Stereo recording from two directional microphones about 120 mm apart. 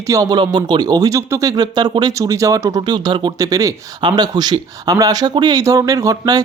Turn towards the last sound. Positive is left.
turn(degrees=-30)  # may be behind; listen again after turning